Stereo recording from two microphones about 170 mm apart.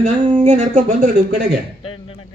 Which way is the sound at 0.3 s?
45° right (ahead or behind).